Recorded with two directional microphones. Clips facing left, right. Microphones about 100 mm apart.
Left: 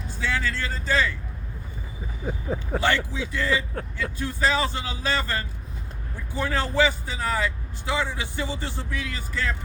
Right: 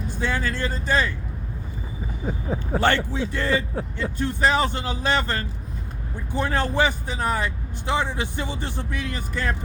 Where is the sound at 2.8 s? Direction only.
55° right (ahead or behind).